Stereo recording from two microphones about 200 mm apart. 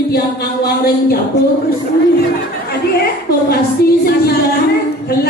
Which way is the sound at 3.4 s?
50° left (ahead or behind).